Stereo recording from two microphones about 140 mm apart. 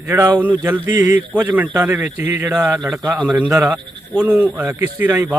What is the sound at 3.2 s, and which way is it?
Speech, 10° right (ahead or behind).